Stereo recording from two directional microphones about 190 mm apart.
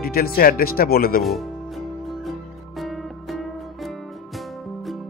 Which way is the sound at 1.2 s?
Centre (ahead or behind).